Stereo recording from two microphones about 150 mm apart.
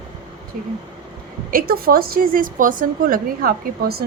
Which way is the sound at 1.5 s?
75° right (ahead or behind).